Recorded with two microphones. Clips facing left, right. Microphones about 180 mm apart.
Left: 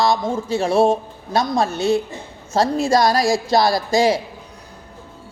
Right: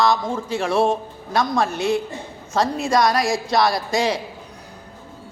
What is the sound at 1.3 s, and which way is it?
A woman's voice, 25° left (ahead or behind).